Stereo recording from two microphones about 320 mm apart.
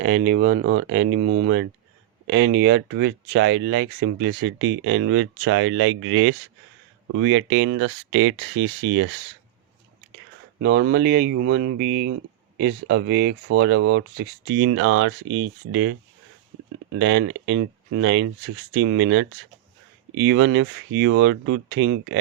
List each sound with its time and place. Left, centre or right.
0.0 s speech: right
10.6 s speech: right
17.0 s speech: right